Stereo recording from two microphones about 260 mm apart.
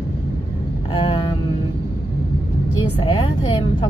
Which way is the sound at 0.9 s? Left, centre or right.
Centre.